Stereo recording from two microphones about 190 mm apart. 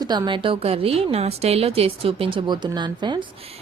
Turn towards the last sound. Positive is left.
turn(degrees=-25)  # may be behind; listen again after turning